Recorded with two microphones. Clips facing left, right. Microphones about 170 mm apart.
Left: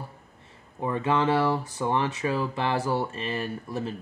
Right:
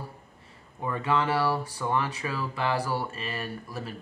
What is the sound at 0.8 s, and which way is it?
Speech, 25° left (ahead or behind).